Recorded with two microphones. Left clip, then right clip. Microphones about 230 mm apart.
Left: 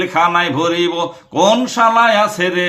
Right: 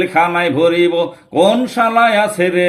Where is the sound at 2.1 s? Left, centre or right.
Left.